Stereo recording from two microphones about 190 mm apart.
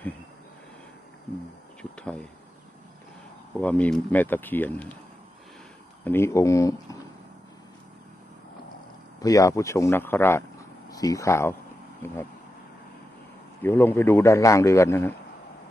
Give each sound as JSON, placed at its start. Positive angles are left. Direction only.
{"t": 1.8, "sound": "a sound", "side_deg": 5}
{"t": 3.5, "sound": "a man's voice", "side_deg": 10}
{"t": 6.0, "sound": "a man's voice", "side_deg": 15}
{"t": 9.2, "sound": "a man's voice", "side_deg": 15}
{"t": 13.6, "sound": "a man's voice", "side_deg": 10}